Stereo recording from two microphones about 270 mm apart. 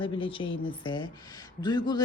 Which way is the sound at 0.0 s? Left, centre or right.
Centre.